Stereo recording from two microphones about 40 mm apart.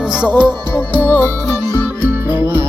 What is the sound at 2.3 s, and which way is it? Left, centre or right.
Music, right.